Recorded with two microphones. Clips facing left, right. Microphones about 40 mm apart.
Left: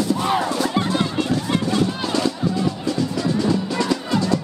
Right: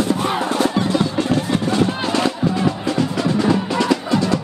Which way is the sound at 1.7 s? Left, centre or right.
Right.